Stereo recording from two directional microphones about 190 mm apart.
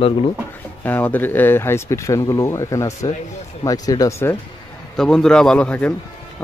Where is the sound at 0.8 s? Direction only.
10° left (ahead or behind).